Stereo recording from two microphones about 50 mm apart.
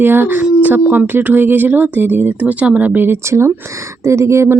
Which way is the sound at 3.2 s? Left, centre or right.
Right.